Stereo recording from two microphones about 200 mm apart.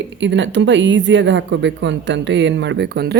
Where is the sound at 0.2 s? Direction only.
65° right (ahead or behind).